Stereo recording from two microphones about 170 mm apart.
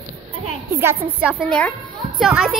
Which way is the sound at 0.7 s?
15° right (ahead or behind).